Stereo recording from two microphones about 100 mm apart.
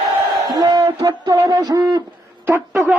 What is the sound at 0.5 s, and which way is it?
Music, 40° right (ahead or behind).